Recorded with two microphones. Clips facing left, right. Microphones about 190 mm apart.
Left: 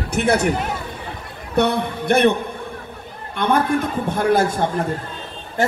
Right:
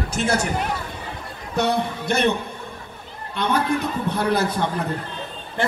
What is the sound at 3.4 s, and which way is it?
A man's voice, 50° left (ahead or behind).